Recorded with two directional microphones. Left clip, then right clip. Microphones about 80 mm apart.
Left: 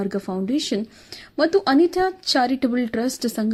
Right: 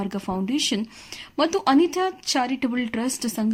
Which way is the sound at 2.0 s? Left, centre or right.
Left.